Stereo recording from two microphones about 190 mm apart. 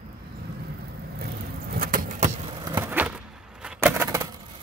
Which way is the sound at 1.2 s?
50° right (ahead or behind).